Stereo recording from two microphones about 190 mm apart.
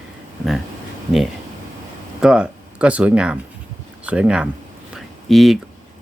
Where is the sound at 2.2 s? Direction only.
5° right (ahead or behind).